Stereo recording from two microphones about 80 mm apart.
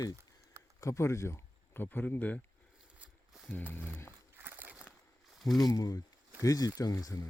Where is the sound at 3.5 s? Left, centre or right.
Left.